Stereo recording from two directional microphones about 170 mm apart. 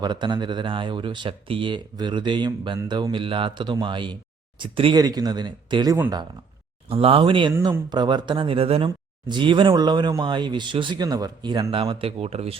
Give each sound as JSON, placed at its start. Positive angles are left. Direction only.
{"t": 0.0, "sound": "speech", "side_deg": -25}